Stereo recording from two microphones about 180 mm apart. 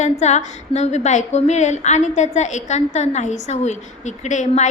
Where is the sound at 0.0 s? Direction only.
40° left (ahead or behind).